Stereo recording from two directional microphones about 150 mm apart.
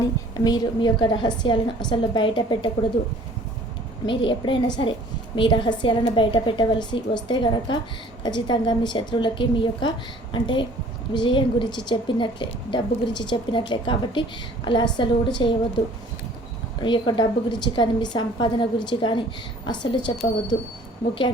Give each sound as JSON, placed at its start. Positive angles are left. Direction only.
{"t": 0.0, "sound": "a woman's voice", "side_deg": 25}
{"t": 4.0, "sound": "a woman's voice", "side_deg": 35}
{"t": 16.8, "sound": "a woman's voice", "side_deg": 30}